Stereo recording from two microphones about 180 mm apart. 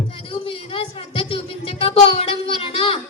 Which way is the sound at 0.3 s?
30° left (ahead or behind).